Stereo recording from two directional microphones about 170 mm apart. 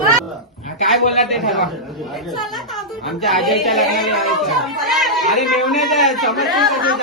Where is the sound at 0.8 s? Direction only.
Centre (ahead or behind).